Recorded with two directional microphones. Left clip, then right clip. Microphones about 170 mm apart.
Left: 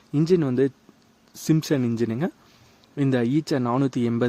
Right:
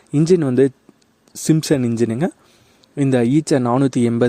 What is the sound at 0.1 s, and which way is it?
Speech, 35° right (ahead or behind).